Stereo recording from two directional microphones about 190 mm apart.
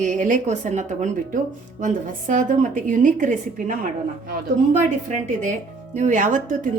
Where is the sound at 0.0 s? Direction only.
40° right (ahead or behind).